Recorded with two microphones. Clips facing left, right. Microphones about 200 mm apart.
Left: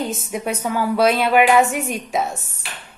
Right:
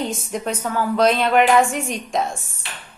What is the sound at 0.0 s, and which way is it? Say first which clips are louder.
A woman's voice: even; 5° left (ahead or behind).